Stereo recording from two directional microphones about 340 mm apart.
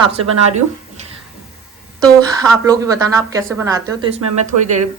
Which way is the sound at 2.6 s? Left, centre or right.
Centre.